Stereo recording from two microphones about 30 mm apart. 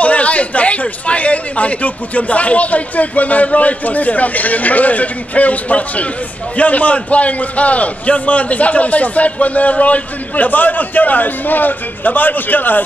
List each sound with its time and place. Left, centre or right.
0.0 s a man's voice: left